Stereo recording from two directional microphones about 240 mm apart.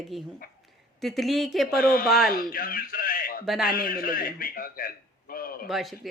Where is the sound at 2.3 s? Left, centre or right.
Left.